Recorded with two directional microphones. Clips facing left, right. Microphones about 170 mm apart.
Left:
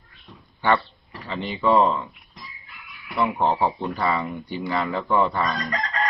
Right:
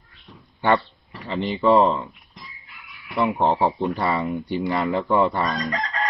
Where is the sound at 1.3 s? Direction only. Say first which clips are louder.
Right 4 dB; 40° right (ahead or behind).